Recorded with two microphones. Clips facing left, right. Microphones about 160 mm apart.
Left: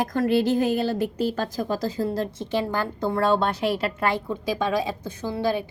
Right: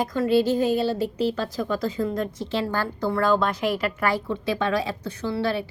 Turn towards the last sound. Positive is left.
turn(degrees=15)  # may be behind; listen again after turning